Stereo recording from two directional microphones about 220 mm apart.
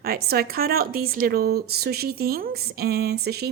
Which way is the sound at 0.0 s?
45° right (ahead or behind).